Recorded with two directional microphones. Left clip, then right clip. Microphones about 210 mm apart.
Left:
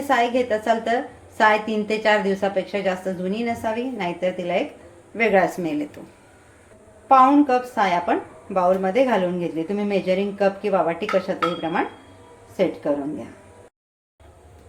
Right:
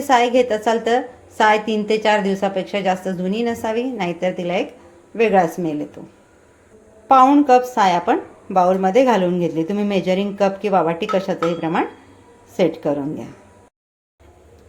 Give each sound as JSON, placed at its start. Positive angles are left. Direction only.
{"t": 0.1, "sound": "a woman's voice", "side_deg": -30}
{"t": 7.1, "sound": "a woman's voice", "side_deg": -35}